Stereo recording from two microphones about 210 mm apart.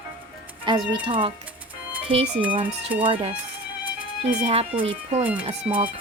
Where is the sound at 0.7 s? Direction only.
20° right (ahead or behind).